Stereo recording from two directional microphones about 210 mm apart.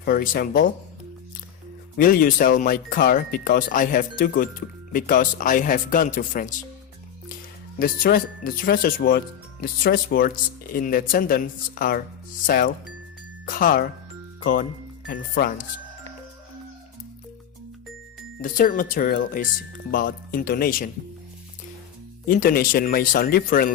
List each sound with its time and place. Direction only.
0.0 s speech: 45° left (ahead or behind)
2.0 s speech: 40° left (ahead or behind)
7.8 s speech: 40° left (ahead or behind)
18.4 s speech: 40° left (ahead or behind)
22.3 s speech: 40° left (ahead or behind)